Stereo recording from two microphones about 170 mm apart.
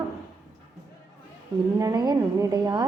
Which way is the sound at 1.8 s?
25° right (ahead or behind).